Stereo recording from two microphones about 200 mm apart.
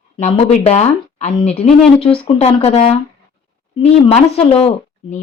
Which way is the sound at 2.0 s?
25° left (ahead or behind).